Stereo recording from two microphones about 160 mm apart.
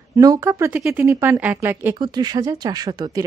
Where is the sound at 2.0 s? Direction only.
25° right (ahead or behind).